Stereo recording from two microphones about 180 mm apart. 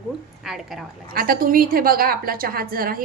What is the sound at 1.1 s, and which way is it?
A woman's voice, 55° right (ahead or behind).